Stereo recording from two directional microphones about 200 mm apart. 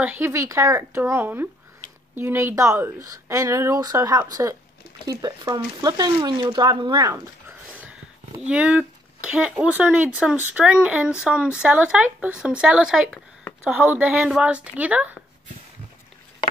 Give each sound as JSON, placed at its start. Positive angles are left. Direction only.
{"t": 0.0, "sound": "speech", "side_deg": -10}